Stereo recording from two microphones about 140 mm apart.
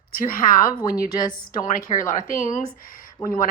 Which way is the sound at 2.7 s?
85° left.